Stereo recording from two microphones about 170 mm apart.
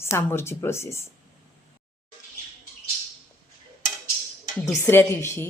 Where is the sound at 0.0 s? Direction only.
15° left (ahead or behind).